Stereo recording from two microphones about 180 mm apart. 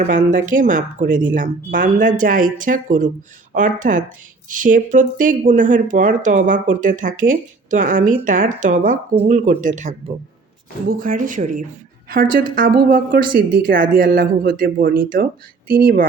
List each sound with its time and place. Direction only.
0.0 s speech: 45° right (ahead or behind)